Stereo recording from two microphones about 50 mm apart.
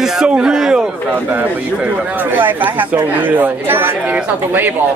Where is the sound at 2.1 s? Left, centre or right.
Right.